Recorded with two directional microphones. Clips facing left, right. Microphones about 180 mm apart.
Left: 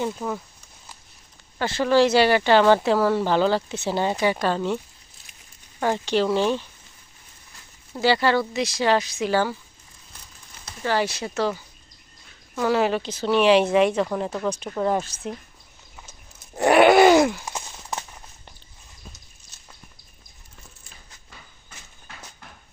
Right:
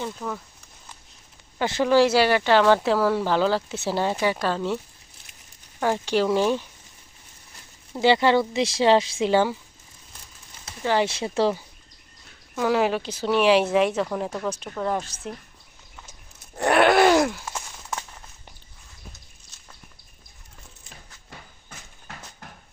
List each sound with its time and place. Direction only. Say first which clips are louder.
0.0 s speech: left 4 dB; 15° left (ahead or behind)
1.5 s speech: even; 15° right (ahead or behind)
5.8 s speech: even; 5° right (ahead or behind)
7.9 s speech: right 2 dB; 20° right (ahead or behind)
10.8 s speech: right 1 dB; 20° right (ahead or behind)
12.5 s speech: left 1 dB; 10° right (ahead or behind)
16.6 s groan: left 3 dB; centre (ahead or behind)
17.4 s a sound: left 1 dB; 20° left (ahead or behind)